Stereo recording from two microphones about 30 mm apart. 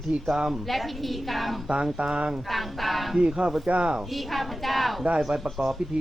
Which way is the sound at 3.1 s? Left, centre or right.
Right.